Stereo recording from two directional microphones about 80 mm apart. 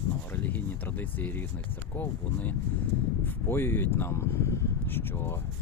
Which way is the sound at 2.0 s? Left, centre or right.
Left.